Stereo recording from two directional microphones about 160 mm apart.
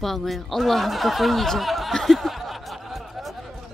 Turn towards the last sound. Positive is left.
turn(degrees=0)  # may be behind; listen again after turning